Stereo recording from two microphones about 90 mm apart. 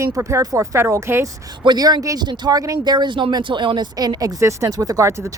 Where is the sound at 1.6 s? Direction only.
50° right (ahead or behind).